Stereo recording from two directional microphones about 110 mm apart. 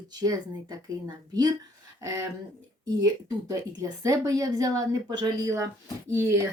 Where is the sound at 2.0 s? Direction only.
30° right (ahead or behind).